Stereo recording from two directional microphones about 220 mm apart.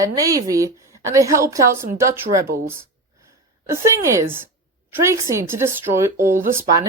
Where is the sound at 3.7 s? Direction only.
10° right (ahead or behind).